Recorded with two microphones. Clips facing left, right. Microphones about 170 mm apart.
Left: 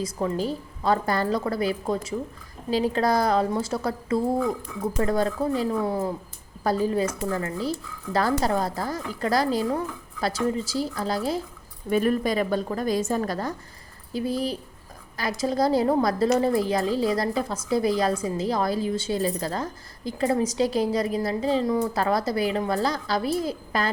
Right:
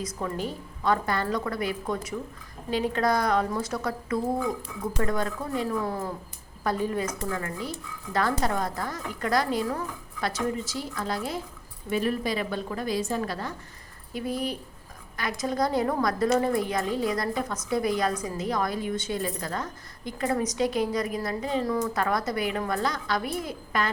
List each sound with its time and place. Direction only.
0.2 s a woman's voice: 35° left (ahead or behind)
11.9 s a woman's voice: 50° left (ahead or behind)
14.1 s a woman's voice: 30° left (ahead or behind)